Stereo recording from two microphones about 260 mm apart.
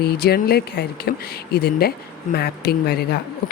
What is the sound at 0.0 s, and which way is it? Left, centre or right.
Speech, left.